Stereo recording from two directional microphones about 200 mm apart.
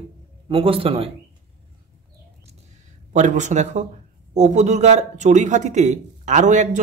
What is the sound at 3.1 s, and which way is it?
Speech, 35° right (ahead or behind).